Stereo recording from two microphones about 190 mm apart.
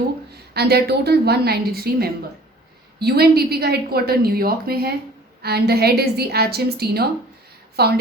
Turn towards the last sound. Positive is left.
turn(degrees=-55)  # may be behind; listen again after turning